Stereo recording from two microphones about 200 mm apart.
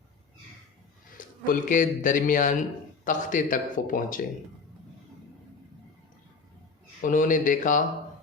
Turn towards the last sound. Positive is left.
turn(degrees=40)  # may be behind; listen again after turning